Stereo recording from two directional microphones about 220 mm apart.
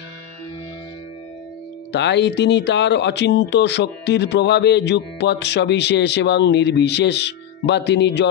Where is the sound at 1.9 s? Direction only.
50° left (ahead or behind).